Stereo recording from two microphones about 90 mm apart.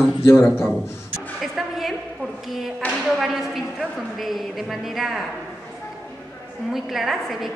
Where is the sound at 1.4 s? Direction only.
Centre (ahead or behind).